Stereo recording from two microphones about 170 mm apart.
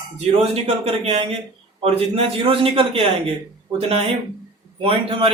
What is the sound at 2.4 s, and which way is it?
Speech, 30° right (ahead or behind).